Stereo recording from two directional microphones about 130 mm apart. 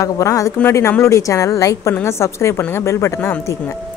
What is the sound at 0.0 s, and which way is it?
A woman's voice, 25° left (ahead or behind).